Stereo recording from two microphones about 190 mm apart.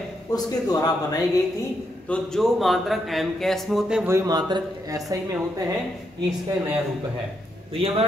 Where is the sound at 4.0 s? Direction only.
15° right (ahead or behind).